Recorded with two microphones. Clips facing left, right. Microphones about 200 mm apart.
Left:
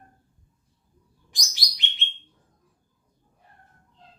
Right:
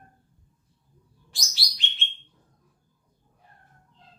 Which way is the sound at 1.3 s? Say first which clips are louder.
Even; 15° left (ahead or behind).